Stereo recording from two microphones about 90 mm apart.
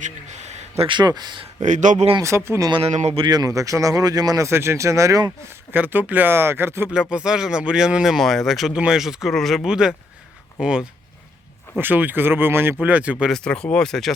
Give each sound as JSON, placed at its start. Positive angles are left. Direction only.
{"t": 0.8, "sound": "speech", "side_deg": -60}
{"t": 2.2, "sound": "speech", "side_deg": -30}
{"t": 2.6, "sound": "speech", "side_deg": -60}
{"t": 5.7, "sound": "speech", "side_deg": -20}
{"t": 6.9, "sound": "speech", "side_deg": -10}
{"t": 9.6, "sound": "speech", "side_deg": -10}
{"t": 11.8, "sound": "speech", "side_deg": -20}
{"t": 13.3, "sound": "speech", "side_deg": 10}